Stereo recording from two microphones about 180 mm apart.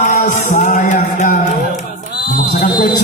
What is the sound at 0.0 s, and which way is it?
Music, 45° left (ahead or behind).